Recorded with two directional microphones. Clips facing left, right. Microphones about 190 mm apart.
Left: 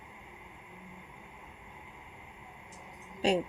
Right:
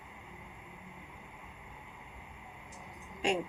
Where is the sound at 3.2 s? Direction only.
35° left (ahead or behind).